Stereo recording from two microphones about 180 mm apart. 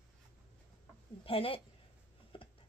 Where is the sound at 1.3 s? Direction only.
30° left (ahead or behind).